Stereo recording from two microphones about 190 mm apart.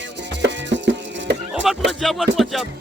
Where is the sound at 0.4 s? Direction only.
65° right (ahead or behind).